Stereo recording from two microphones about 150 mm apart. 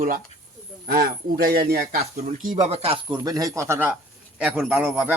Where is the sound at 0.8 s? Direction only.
90° right.